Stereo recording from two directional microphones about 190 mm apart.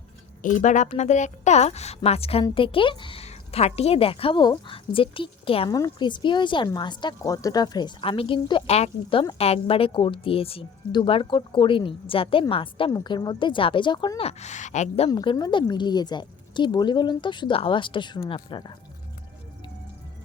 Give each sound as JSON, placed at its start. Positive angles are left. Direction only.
{"t": 0.4, "sound": "a woman's voice", "side_deg": 40}
{"t": 15.1, "sound": "a woman's voice", "side_deg": 25}